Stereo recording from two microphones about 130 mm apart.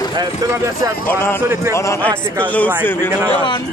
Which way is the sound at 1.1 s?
20° left (ahead or behind).